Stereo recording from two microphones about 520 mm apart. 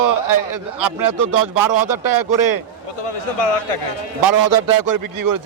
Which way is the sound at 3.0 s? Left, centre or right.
Left.